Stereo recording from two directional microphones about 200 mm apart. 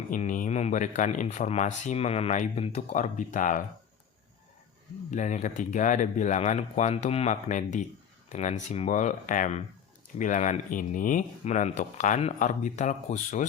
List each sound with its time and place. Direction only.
0.1 s speech: 40° left (ahead or behind)
5.1 s speech: 40° left (ahead or behind)